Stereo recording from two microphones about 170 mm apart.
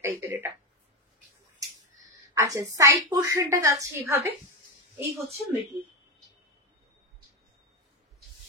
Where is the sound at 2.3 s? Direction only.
20° right (ahead or behind).